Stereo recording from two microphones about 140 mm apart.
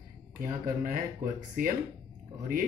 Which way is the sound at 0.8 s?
85° right.